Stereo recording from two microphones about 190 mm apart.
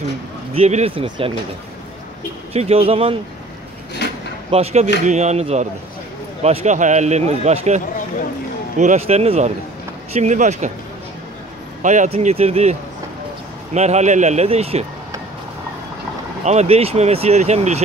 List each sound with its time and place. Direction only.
0.6 s speech: 35° right (ahead or behind)
2.5 s speech: 30° right (ahead or behind)
4.5 s speech: 30° right (ahead or behind)
11.8 s speech: 40° right (ahead or behind)
13.7 s speech: 35° right (ahead or behind)
16.4 s speech: 35° right (ahead or behind)